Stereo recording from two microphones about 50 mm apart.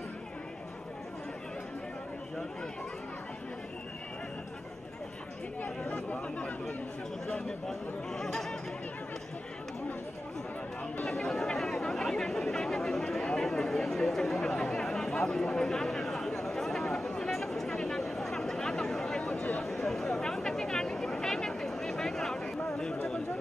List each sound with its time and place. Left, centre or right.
6.0 s speech: left
7.2 s speech: centre
11.1 s chatter: centre
19.6 s a sound: centre